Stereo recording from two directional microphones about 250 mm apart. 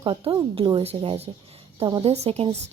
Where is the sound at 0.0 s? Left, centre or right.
Right.